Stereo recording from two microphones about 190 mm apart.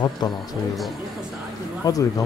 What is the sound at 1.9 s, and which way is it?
Speech, 20° left (ahead or behind).